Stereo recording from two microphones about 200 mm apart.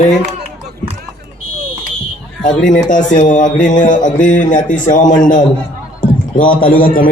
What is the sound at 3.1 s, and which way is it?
A man's voice, 40° left (ahead or behind).